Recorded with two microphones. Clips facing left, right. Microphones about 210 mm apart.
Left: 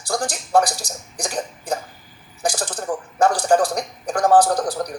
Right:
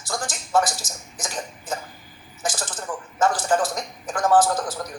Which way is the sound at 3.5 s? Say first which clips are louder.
Left 5 dB; 35° left (ahead or behind).